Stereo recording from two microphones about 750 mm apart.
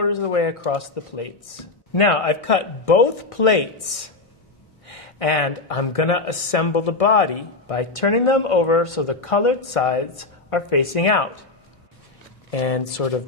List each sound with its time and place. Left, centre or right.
0.0 s speech: left
12.4 s speech: left